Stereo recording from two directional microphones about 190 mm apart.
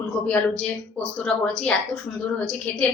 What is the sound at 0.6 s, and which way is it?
A woman's voice, 5° left (ahead or behind).